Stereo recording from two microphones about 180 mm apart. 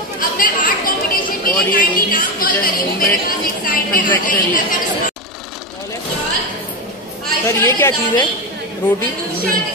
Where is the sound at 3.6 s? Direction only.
50° left (ahead or behind).